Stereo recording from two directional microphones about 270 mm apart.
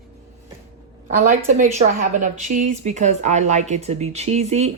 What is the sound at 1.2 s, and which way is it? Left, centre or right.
A woman's voice, right.